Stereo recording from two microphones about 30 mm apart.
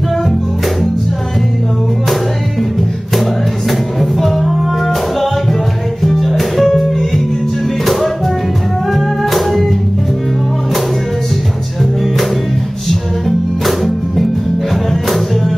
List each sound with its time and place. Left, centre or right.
4.0 s music: centre
13.7 s music: centre